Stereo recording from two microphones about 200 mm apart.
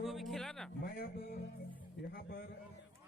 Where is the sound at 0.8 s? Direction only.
50° left (ahead or behind).